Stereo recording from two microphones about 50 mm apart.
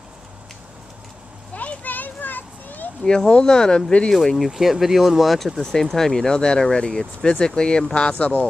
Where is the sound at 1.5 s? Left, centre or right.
Left.